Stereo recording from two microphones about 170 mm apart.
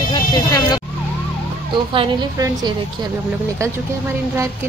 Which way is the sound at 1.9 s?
30° right (ahead or behind).